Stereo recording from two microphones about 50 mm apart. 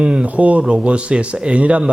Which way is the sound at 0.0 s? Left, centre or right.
Right.